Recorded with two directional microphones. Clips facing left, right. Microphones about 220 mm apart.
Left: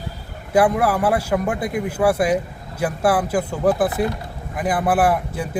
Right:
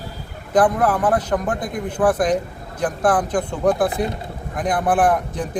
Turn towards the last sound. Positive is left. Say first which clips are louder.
# right 1 dB
turn(degrees=5)  # may be behind; listen again after turning